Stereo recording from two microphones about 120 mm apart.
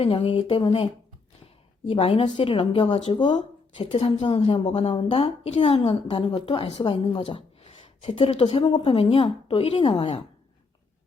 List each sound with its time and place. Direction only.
0.0 s a woman's voice: 45° left (ahead or behind)
1.9 s a woman's voice: 50° left (ahead or behind)
3.9 s a woman's voice: 50° left (ahead or behind)
6.1 s a woman's voice: 40° left (ahead or behind)